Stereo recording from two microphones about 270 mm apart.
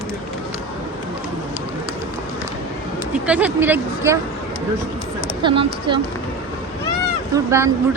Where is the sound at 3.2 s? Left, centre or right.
Centre.